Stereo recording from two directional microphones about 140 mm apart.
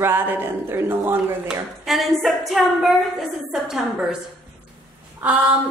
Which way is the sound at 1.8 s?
Centre (ahead or behind).